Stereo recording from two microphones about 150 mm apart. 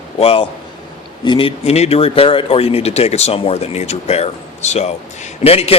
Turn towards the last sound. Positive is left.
turn(degrees=40)  # may be behind; listen again after turning